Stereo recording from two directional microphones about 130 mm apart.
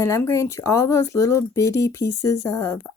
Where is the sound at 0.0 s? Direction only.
25° left (ahead or behind).